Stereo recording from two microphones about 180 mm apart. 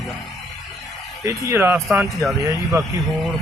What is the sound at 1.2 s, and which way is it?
Speech, 15° right (ahead or behind).